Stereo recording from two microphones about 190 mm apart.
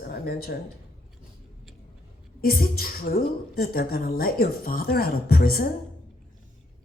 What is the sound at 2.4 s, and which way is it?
A woman's voice, 50° left (ahead or behind).